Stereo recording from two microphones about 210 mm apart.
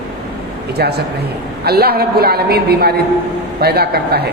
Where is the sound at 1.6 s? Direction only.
50° right (ahead or behind).